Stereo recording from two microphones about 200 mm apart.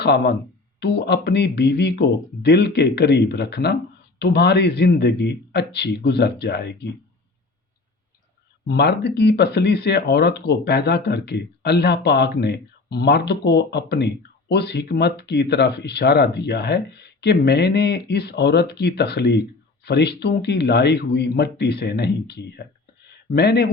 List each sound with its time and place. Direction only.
0.0 s speech: 55° left (ahead or behind)
8.6 s speech: 55° left (ahead or behind)
23.0 s a sound: 55° left (ahead or behind)